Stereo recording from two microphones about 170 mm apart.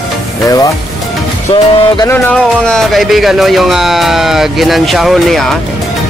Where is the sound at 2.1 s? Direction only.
5° left (ahead or behind).